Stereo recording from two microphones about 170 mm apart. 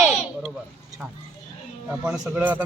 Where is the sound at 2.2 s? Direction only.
10° right (ahead or behind).